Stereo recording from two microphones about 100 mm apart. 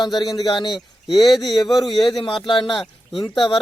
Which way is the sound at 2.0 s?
50° left (ahead or behind).